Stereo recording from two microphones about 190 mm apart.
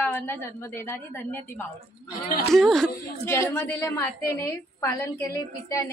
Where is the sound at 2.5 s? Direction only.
Centre (ahead or behind).